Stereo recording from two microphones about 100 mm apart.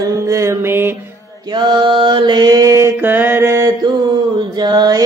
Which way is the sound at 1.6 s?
50° right (ahead or behind).